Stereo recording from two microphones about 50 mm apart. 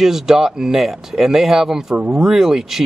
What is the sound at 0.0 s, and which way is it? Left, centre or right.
Speech, centre.